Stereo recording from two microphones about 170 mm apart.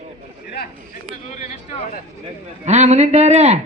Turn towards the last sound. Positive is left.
turn(degrees=-40)  # may be behind; listen again after turning